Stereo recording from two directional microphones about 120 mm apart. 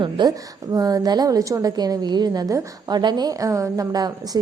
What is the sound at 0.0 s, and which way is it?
A woman's voice, 35° right (ahead or behind).